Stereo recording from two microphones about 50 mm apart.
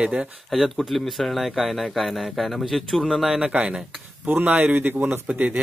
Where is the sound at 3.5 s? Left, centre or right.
Right.